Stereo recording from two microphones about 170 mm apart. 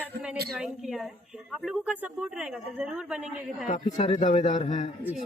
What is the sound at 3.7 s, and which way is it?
A man's voice, 45° left (ahead or behind).